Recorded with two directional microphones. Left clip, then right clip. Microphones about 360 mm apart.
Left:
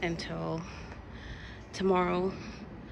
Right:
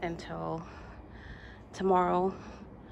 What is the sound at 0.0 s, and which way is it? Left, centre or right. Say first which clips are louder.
Speech: left 2 dB; centre.